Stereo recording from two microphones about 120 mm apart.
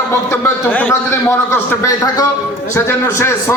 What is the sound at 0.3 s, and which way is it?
A man's voice, 20° left (ahead or behind).